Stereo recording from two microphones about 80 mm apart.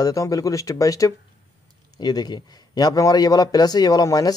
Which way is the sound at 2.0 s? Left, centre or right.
Left.